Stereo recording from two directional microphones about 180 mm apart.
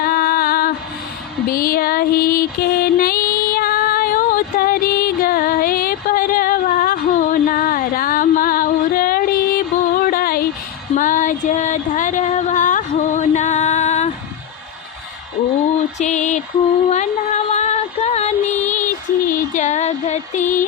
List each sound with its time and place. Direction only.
0.0 s music: 55° left (ahead or behind); by 14.1 s 40° left (ahead or behind)
16.0 s a sound: 40° left (ahead or behind)
16.9 s music: 40° left (ahead or behind)